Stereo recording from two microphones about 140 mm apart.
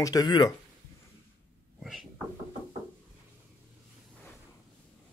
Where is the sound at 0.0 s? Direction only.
30° left (ahead or behind).